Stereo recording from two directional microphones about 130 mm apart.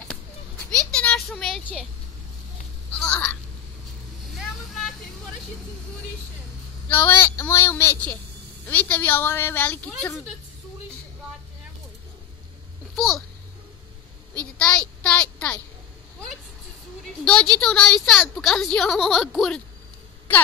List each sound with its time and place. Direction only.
0.7 s a sound: 5° left (ahead or behind)
3.0 s speech: 5° left (ahead or behind)
4.4 s vehicle: centre (ahead or behind)
6.9 s speech: 15° left (ahead or behind)
12.9 s a child's voice: centre (ahead or behind)
14.6 s a child's voice: 10° left (ahead or behind)
17.2 s a woman's voice: 5° left (ahead or behind)